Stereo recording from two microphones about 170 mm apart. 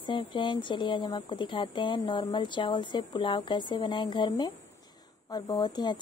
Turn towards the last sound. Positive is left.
turn(degrees=25)  # may be behind; listen again after turning